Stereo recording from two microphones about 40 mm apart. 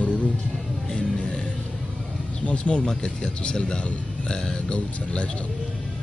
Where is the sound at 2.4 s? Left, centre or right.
Left.